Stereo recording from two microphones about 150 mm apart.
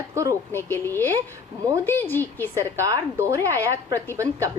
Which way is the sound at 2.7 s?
20° right (ahead or behind).